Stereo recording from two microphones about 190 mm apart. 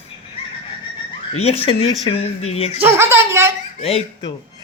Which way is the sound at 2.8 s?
10° right (ahead or behind).